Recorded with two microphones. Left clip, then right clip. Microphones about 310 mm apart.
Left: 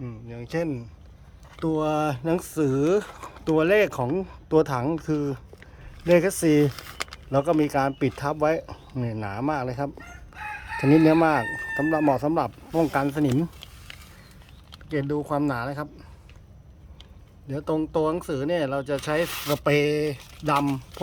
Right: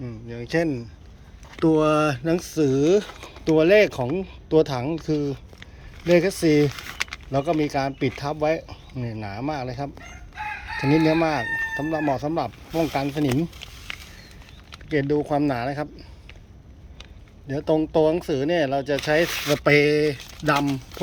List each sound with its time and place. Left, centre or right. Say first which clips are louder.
0.0 s a sound: right 4 dB; centre
1.5 s speech: right 6 dB; centre
10.9 s speech: left 2 dB; centre
14.8 s speech: right 5 dB; centre
17.5 s speech: right 5 dB; centre